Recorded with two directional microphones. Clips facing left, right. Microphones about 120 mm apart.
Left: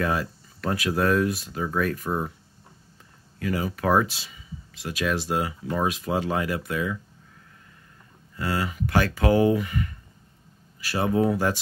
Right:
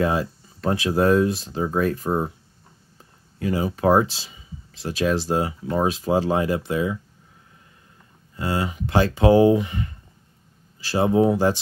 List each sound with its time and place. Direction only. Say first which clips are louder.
0.0 s speech: right 4 dB; 25° right (ahead or behind)
8.4 s speech: right 2 dB; 25° right (ahead or behind)